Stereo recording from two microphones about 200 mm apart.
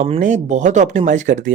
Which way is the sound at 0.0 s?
35° right (ahead or behind).